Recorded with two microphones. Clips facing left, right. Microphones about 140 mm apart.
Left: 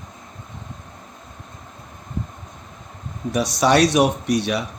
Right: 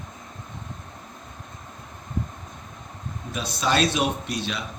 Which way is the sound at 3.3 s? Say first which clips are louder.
Left 8 dB; 70° left (ahead or behind).